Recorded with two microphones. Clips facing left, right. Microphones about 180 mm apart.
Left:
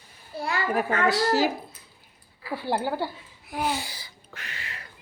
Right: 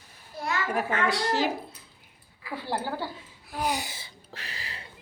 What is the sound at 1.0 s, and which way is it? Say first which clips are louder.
Speech: left 6 dB; 5° left (ahead or behind).